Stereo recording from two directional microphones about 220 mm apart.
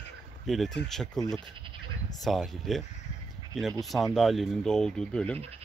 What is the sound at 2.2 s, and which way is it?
Speech, centre (ahead or behind).